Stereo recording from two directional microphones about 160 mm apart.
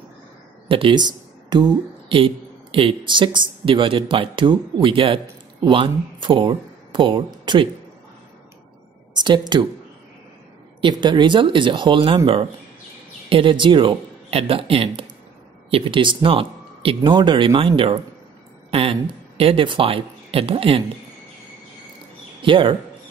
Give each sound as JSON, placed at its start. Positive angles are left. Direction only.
{"t": 0.7, "sound": "speech", "side_deg": -35}
{"t": 9.1, "sound": "speech", "side_deg": -30}
{"t": 10.8, "sound": "speech", "side_deg": -30}
{"t": 13.3, "sound": "speech", "side_deg": -30}
{"t": 22.4, "sound": "speech", "side_deg": -30}